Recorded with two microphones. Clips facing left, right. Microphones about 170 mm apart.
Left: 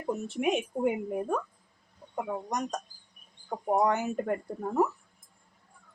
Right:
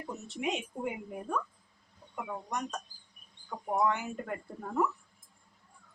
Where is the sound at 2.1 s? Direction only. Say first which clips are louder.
Left 5 dB; 40° left (ahead or behind).